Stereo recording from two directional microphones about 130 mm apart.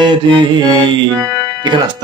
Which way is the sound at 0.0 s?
35° right (ahead or behind).